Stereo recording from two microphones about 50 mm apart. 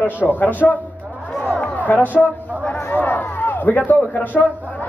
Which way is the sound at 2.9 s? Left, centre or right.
Left.